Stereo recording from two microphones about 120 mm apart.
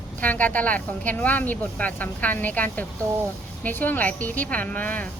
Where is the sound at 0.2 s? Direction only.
15° left (ahead or behind).